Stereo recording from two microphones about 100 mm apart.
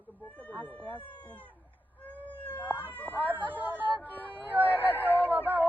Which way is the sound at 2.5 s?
15° left (ahead or behind).